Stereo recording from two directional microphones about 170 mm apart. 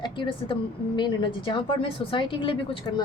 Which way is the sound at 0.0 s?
30° left (ahead or behind).